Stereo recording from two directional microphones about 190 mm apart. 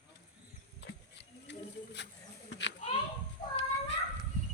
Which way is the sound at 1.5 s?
65° left (ahead or behind).